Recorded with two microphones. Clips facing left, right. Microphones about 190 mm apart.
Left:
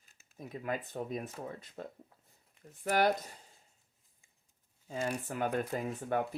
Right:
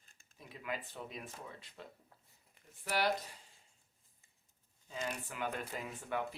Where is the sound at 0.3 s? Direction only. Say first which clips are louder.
Left 6 dB; 45° left (ahead or behind).